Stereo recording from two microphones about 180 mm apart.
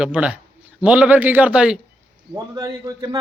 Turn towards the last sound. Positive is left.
turn(degrees=-20)  # may be behind; listen again after turning